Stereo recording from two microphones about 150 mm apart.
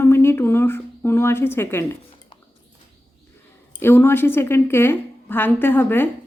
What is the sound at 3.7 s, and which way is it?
Speech, 15° left (ahead or behind).